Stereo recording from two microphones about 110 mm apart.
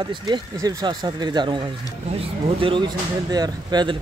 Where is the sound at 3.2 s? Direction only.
35° right (ahead or behind).